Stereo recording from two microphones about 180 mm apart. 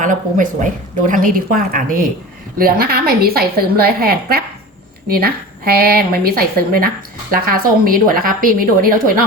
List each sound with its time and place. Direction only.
0.0 s a woman's voice: 45° right (ahead or behind)